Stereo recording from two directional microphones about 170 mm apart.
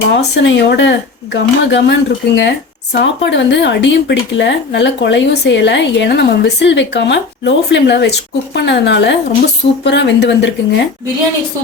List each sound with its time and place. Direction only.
0.1 s speech: 90° left